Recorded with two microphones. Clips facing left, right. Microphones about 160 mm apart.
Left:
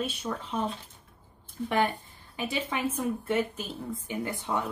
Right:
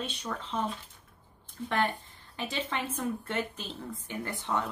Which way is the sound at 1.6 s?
15° left (ahead or behind).